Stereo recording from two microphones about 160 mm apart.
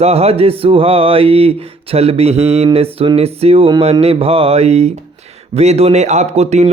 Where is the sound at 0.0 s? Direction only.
40° right (ahead or behind).